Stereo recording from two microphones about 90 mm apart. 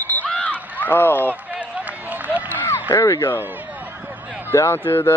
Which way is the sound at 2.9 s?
30° left (ahead or behind).